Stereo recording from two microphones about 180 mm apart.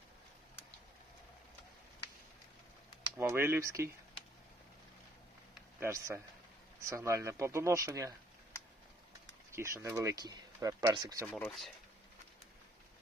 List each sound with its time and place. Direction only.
3.2 s speech: 15° right (ahead or behind)
5.8 s speech: 15° right (ahead or behind)
9.5 s speech: 15° right (ahead or behind)
11.3 s speech: 5° left (ahead or behind)